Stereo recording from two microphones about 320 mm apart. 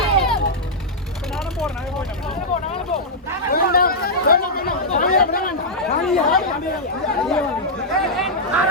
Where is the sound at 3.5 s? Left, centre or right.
Left.